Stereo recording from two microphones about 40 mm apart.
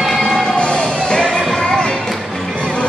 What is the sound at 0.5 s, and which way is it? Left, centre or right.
Music, left.